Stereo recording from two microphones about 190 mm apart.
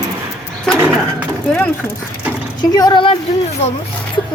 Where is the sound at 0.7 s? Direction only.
10° right (ahead or behind).